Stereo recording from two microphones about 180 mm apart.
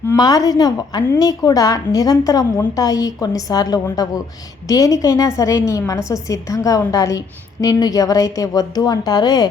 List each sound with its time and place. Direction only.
0.1 s a woman's voice: 20° left (ahead or behind)